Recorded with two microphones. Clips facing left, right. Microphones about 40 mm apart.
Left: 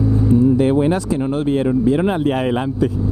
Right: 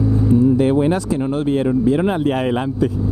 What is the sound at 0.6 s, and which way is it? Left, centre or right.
Speech, centre.